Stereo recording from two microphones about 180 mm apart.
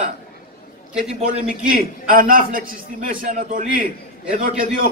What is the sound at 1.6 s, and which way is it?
A man's voice, 50° right (ahead or behind).